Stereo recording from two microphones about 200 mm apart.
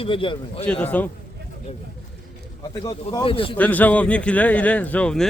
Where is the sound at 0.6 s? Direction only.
10° left (ahead or behind).